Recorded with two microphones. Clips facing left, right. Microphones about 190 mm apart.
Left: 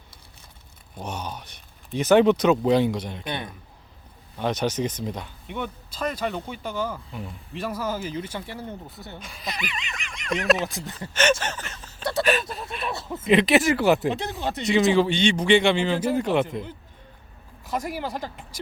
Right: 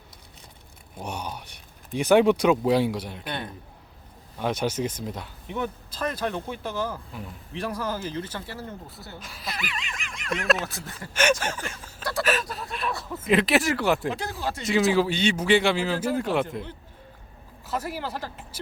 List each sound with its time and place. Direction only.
0.9 s speech: 10° right (ahead or behind)
3.2 s speech: 15° left (ahead or behind)
4.4 s speech: 5° right (ahead or behind); by 8.7 s 15° left (ahead or behind)
9.1 s speech: centre (ahead or behind)
10.6 s speech: 15° left (ahead or behind)
11.1 s a sound: 10° right (ahead or behind)
12.2 s speech: centre (ahead or behind)
12.9 s speech: 25° left (ahead or behind)
13.2 s speech: centre (ahead or behind)
14.1 s speech: 20° left (ahead or behind)
14.6 s speech: centre (ahead or behind)
16.0 s speech: 10° left (ahead or behind)
16.2 s speech: centre (ahead or behind)
17.7 s speech: 15° left (ahead or behind)